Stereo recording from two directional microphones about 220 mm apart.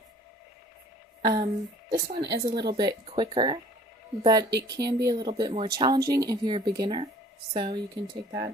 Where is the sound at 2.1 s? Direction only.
50° right (ahead or behind).